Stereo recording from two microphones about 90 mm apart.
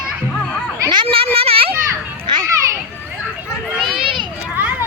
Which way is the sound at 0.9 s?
90° right.